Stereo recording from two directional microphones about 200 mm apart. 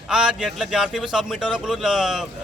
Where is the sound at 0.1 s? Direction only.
5° right (ahead or behind).